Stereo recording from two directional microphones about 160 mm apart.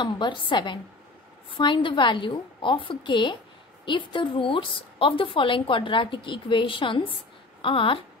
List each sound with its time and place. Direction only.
0.0 s a woman's voice: 30° left (ahead or behind)